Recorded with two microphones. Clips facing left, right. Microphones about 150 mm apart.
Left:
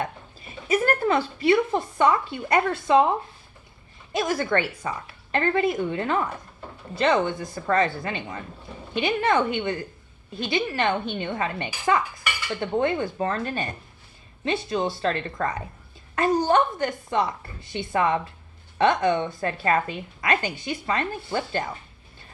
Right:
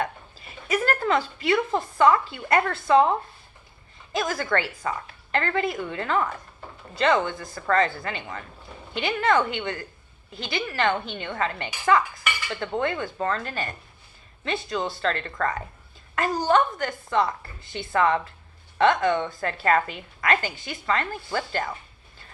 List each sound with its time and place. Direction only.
0.0 s a sound: 25° left (ahead or behind)
1.7 s a woman's voice: 20° left (ahead or behind)
4.1 s a woman's voice: 25° left (ahead or behind)